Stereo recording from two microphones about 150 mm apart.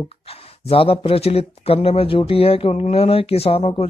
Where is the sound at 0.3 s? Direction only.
40° left (ahead or behind).